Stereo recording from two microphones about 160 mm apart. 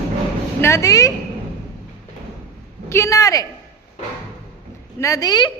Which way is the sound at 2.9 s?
20° left (ahead or behind).